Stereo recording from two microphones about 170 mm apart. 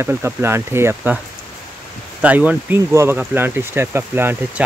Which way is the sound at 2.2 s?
10° right (ahead or behind).